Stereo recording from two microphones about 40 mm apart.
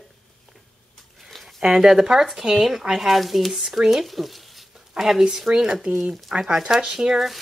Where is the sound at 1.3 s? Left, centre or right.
Centre.